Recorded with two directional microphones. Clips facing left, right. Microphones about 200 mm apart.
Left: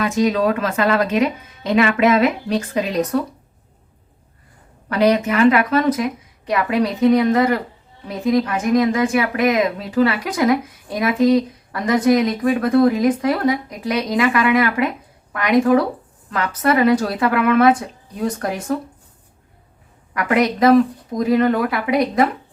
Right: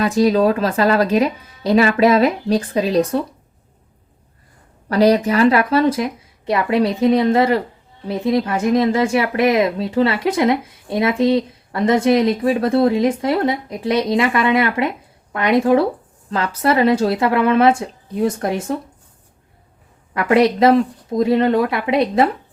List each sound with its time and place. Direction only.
0.0 s speech: 35° right (ahead or behind)
4.9 s speech: 35° right (ahead or behind)
20.1 s speech: 30° right (ahead or behind)